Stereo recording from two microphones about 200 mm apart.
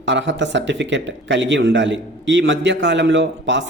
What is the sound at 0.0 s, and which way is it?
Speech, 65° right (ahead or behind).